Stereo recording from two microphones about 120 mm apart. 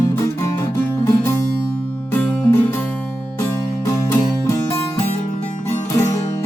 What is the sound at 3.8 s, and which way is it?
Music, 25° left (ahead or behind).